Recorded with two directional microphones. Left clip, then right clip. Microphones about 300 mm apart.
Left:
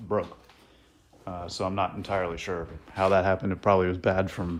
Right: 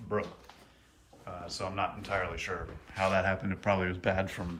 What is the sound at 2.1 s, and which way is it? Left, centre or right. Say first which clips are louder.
Speech: left 4 dB; centre.